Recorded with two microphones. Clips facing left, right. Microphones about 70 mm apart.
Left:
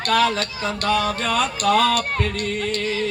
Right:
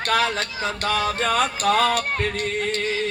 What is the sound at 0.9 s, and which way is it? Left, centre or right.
Music, right.